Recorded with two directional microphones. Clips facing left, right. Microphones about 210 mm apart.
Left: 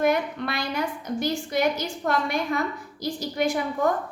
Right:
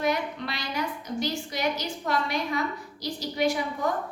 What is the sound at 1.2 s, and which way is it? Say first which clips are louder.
A woman's voice: left 5 dB; 50° left (ahead or behind).